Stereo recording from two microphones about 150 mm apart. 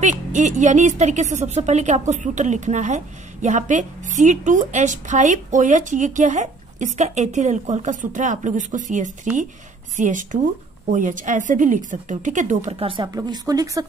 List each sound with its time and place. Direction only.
0.0 s a woman's voice: 55° right (ahead or behind)
12.8 s speech: 35° right (ahead or behind)